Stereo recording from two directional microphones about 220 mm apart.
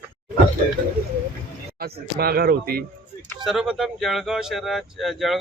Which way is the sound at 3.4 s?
Centre (ahead or behind).